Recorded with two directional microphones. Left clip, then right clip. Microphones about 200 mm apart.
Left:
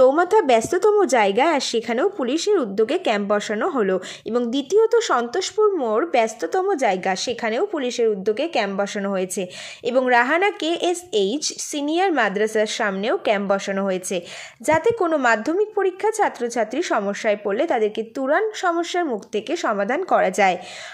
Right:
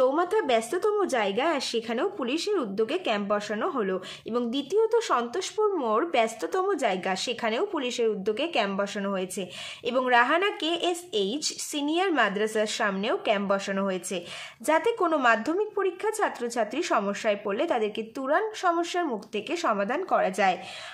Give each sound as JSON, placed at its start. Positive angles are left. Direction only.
{"t": 0.0, "sound": "a woman's voice", "side_deg": 25}